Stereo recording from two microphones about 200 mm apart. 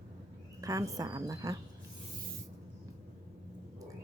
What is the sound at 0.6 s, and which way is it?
Speech, 15° right (ahead or behind).